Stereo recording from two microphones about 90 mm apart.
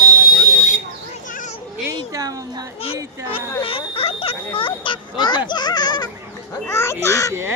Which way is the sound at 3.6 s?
90° left.